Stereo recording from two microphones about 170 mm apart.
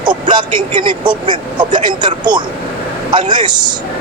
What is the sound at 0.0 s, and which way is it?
Speech, 25° right (ahead or behind).